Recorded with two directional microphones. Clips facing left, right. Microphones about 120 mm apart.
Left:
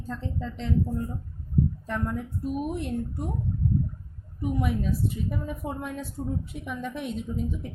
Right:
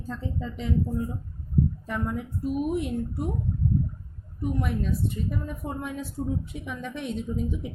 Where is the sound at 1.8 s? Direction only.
5° right (ahead or behind).